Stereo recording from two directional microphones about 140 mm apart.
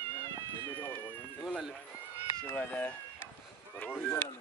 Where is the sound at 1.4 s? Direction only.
5° left (ahead or behind).